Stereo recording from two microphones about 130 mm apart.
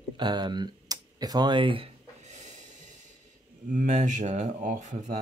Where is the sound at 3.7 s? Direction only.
80° right.